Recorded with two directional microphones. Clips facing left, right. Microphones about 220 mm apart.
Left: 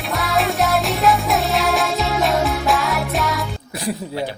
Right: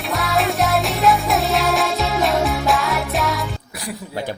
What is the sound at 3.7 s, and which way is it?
Music, 25° left (ahead or behind).